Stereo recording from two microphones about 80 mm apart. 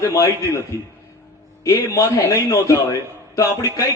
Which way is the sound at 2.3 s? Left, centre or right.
Left.